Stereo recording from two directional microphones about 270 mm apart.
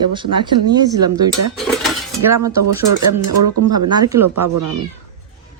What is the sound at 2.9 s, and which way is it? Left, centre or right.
Speech, right.